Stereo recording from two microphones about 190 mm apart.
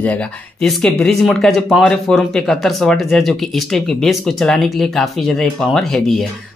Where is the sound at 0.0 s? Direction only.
5° left (ahead or behind).